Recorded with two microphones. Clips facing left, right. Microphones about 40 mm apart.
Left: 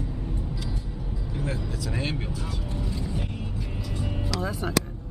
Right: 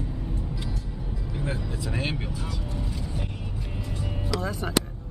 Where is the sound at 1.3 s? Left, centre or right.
Centre.